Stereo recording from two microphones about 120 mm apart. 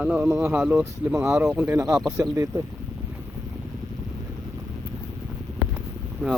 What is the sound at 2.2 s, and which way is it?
Speech, 25° right (ahead or behind).